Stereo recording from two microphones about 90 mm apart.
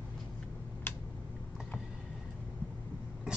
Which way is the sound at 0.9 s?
25° left (ahead or behind).